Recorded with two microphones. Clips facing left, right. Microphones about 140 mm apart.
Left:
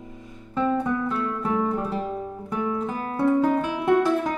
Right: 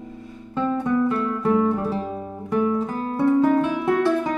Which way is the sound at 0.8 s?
Centre (ahead or behind).